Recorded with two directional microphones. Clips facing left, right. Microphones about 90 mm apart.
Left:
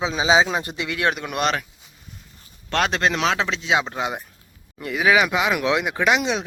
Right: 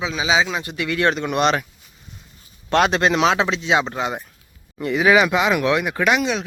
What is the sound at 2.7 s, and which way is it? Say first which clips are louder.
Speech: right 4 dB; 5° right (ahead or behind).